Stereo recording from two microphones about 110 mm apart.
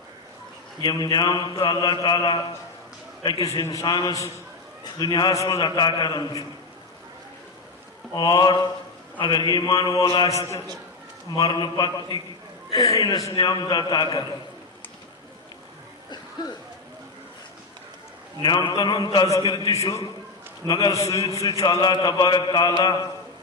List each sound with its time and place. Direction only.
0.8 s mantra: 40° left (ahead or behind)
4.8 s a man's voice: 40° left (ahead or behind)
5.3 s a man's voice: 30° left (ahead or behind)
5.6 s mantra: 40° left (ahead or behind)
8.1 s mantra: 40° left (ahead or behind)
13.4 s mantra: 45° left (ahead or behind)
18.4 s mantra: 40° left (ahead or behind)
20.7 s mantra: 40° left (ahead or behind)
21.0 s mantra: 30° left (ahead or behind)